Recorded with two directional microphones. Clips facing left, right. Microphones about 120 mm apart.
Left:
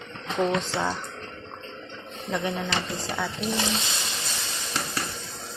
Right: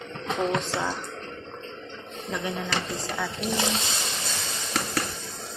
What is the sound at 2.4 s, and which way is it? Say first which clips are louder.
Speech: left 1 dB; centre (ahead or behind).